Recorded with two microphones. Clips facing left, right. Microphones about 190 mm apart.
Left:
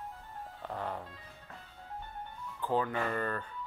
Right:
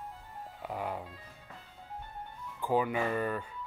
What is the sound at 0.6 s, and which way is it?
Speech, 10° right (ahead or behind).